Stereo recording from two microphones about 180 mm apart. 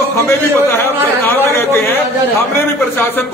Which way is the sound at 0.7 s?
10° left (ahead or behind).